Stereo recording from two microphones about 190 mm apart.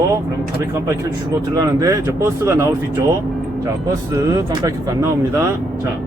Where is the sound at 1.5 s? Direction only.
15° right (ahead or behind).